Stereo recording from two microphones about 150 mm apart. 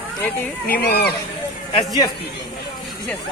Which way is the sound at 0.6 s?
90° left.